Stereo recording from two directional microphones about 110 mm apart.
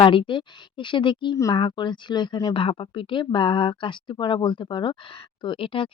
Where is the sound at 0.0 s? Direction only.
50° left (ahead or behind).